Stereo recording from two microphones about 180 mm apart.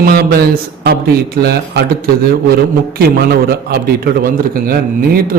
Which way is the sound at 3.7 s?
55° right (ahead or behind).